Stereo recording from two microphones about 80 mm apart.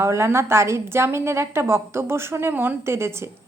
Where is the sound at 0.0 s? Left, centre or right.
Right.